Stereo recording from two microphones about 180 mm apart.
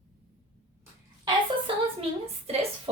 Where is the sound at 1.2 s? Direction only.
30° right (ahead or behind).